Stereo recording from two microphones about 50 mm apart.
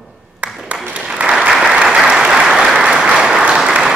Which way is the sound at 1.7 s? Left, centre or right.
Centre.